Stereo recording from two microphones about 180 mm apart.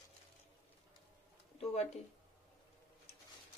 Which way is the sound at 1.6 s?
35° left (ahead or behind).